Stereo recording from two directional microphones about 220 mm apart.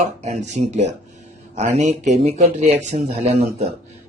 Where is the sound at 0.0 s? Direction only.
30° right (ahead or behind).